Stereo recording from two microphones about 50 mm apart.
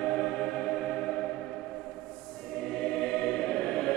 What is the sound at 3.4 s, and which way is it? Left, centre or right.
Choir, centre.